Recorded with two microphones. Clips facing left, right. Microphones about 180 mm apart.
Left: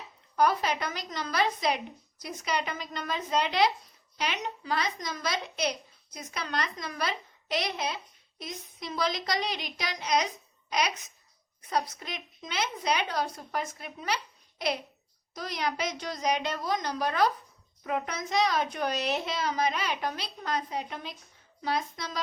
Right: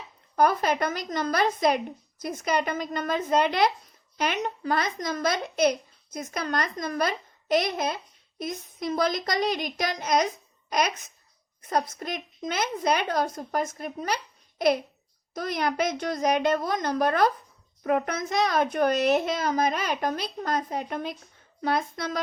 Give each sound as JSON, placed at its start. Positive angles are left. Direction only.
{"t": 0.3, "sound": "speech", "side_deg": -50}